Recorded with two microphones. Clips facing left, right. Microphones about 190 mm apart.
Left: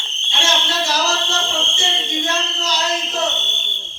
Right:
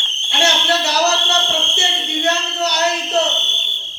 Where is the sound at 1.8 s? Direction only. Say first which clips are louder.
Right 1 dB; 65° right (ahead or behind).